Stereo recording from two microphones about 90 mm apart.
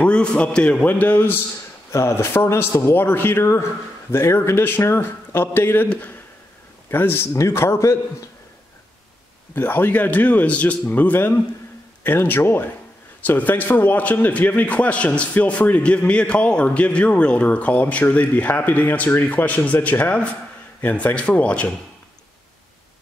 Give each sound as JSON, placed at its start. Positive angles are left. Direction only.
{"t": 0.0, "sound": "a man's voice", "side_deg": 10}
{"t": 1.9, "sound": "a man's voice", "side_deg": 30}
{"t": 9.6, "sound": "a man's voice", "side_deg": 20}